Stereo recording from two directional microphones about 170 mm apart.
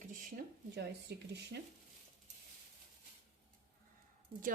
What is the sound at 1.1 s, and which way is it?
Speech, 65° right (ahead or behind).